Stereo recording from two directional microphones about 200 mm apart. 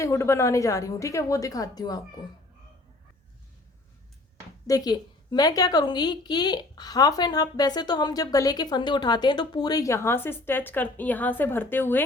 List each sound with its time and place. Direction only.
0.0 s a woman's voice: 15° left (ahead or behind)
4.6 s a woman's voice: 20° left (ahead or behind)